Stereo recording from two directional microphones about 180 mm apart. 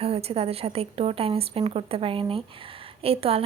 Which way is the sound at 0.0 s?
35° right (ahead or behind).